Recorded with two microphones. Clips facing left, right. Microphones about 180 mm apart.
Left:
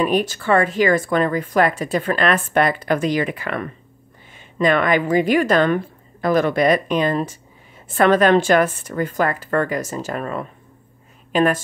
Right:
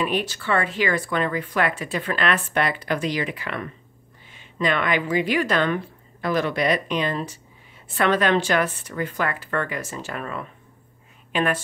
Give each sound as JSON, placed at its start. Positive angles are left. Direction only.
{"t": 0.0, "sound": "a woman's voice", "side_deg": 45}